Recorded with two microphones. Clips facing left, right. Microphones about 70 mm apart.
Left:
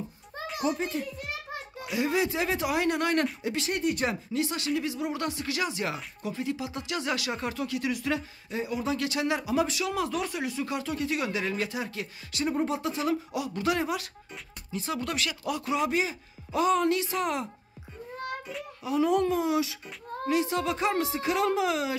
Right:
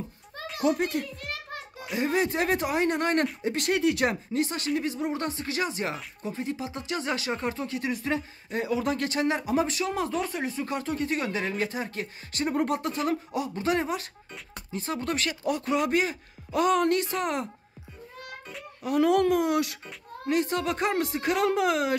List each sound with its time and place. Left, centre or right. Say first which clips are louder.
0.7 s a child's voice: right 4 dB; right
1.1 s music: even; centre
2.0 s speech: right 1 dB; right
2.7 s speech: right 1 dB; right
8.5 s speech: right 3 dB; right
12.5 s speech: right 4 dB; right
18.8 s speech: right 2 dB; right
19.0 s speech: right 3 dB; right